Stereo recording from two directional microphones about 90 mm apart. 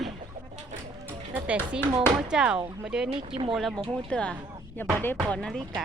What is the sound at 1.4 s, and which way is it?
Speech, 15° right (ahead or behind).